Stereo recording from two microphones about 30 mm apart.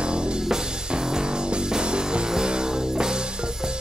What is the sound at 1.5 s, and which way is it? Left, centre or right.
Music, right.